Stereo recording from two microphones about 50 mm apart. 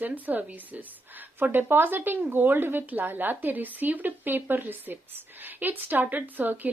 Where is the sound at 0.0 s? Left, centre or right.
Right.